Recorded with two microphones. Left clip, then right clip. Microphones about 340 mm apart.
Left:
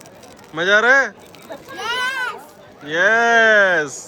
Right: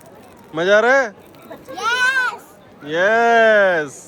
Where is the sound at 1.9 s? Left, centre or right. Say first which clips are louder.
Right 5 dB; right.